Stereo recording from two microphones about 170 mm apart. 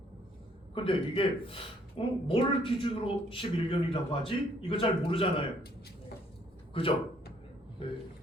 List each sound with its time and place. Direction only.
0.7 s speech: 30° left (ahead or behind)
6.8 s speech: 30° left (ahead or behind)